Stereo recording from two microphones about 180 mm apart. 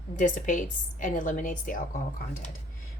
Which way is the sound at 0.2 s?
45° left (ahead or behind).